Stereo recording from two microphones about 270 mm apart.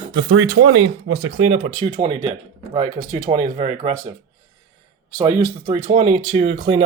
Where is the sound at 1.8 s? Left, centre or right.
Right.